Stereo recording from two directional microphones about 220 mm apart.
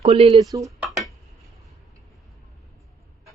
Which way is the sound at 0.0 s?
25° right (ahead or behind).